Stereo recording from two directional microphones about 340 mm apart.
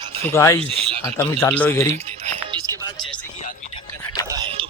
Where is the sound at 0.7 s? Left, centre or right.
Centre.